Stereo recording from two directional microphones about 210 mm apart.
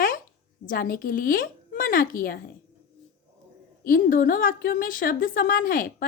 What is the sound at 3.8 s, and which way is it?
A woman's voice, 40° left (ahead or behind).